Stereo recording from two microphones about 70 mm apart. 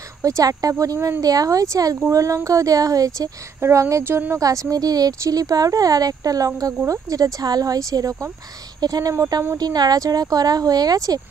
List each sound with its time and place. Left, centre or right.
0.2 s speech: right
3.6 s speech: right
4.4 s speech: right
8.8 s speech: right